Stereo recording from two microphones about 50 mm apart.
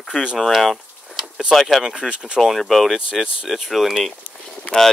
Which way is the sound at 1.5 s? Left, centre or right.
Centre.